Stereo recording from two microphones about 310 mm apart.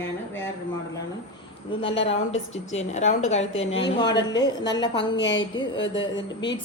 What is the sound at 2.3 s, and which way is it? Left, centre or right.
Speech, left.